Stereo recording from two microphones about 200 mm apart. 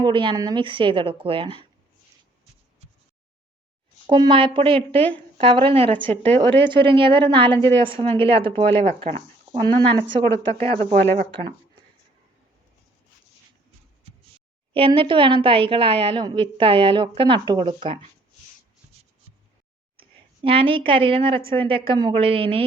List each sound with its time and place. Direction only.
0.0 s a woman's voice: 25° right (ahead or behind)
4.0 s a woman's voice: 25° right (ahead or behind)
14.7 s a woman's voice: 25° right (ahead or behind)
20.0 s a woman's voice: 25° right (ahead or behind)